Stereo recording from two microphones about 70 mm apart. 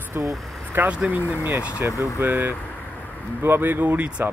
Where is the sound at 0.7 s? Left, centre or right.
Centre.